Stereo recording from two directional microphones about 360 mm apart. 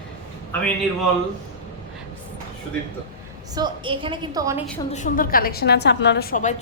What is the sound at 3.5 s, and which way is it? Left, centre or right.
A woman's voice, centre.